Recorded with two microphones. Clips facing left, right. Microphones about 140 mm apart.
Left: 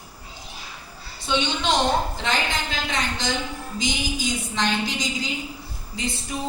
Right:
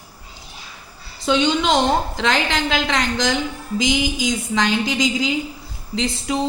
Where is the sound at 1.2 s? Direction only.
90° right.